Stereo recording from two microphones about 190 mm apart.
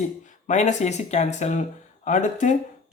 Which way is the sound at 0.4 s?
40° left (ahead or behind).